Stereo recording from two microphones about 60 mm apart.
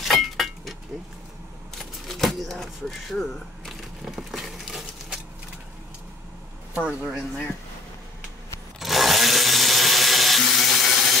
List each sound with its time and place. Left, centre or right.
0.0 s vehicle: centre
1.8 s shuffling cards: centre
6.7 s speech: centre
8.7 s a sound: centre